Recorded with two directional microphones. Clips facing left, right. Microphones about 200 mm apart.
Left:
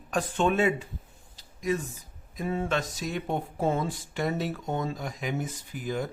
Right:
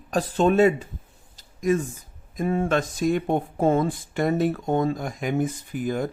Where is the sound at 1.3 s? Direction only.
50° right (ahead or behind).